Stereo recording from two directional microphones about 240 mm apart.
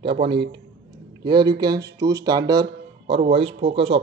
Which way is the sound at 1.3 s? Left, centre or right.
Centre.